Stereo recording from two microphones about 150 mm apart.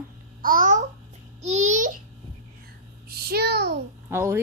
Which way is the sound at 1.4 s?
50° right (ahead or behind).